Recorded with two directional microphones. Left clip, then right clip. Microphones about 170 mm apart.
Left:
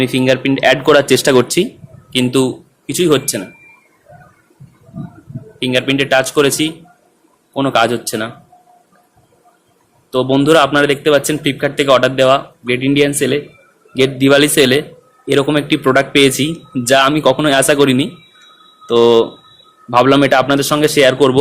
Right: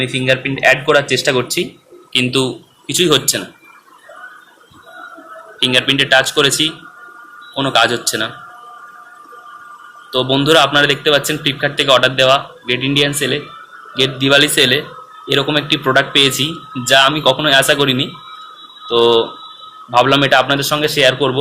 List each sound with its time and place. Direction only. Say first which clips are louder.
0.0 s speech: left 2 dB; 60° left (ahead or behind); by 3.2 s 45° left (ahead or behind)
5.5 s speech: right 2 dB; 45° left (ahead or behind)
10.1 s speech: left 1 dB; 50° left (ahead or behind)